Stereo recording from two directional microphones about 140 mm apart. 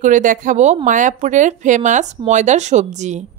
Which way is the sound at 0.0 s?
65° right (ahead or behind).